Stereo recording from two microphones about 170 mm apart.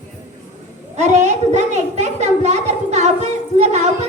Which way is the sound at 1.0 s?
40° right (ahead or behind).